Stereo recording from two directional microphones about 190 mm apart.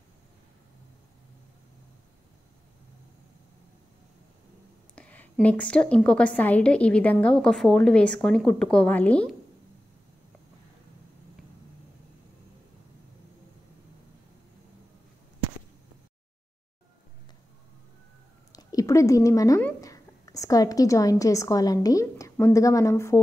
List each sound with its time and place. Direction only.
4.9 s a woman's voice: 10° left (ahead or behind)
18.5 s speech: 20° left (ahead or behind)